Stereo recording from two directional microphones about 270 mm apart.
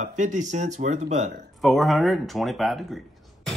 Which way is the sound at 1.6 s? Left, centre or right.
Centre.